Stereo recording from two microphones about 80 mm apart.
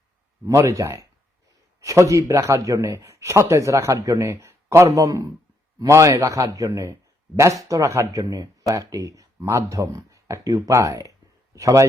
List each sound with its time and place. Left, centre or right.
0.4 s a man's voice: right